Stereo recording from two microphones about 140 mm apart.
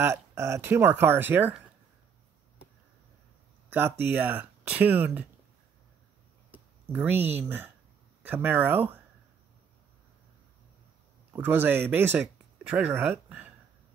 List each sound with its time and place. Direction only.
0.0 s speech: 20° right (ahead or behind)
4.0 s speech: 15° right (ahead or behind)
6.5 s speech: 10° right (ahead or behind)
11.3 s speech: 15° right (ahead or behind)